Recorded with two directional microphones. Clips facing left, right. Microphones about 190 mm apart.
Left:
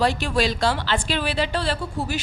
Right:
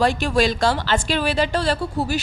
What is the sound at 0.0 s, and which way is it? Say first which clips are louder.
A woman's voice: right 3 dB; 45° right (ahead or behind).